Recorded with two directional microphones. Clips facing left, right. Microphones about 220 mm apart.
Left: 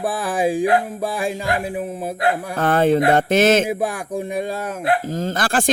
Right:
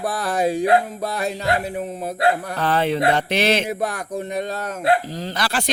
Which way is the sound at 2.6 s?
50° left (ahead or behind).